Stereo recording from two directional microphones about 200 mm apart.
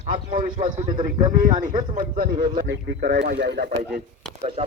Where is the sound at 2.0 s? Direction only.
45° right (ahead or behind).